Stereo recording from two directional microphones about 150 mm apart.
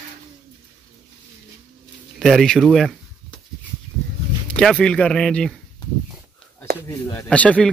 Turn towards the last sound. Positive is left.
turn(degrees=10)  # may be behind; listen again after turning